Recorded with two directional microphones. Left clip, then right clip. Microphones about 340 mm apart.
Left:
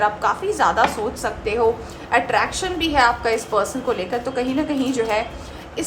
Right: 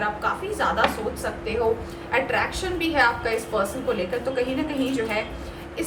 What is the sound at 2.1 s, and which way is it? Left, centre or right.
A woman's voice, centre.